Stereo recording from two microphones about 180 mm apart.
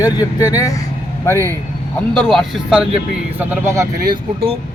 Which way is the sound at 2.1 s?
Centre (ahead or behind).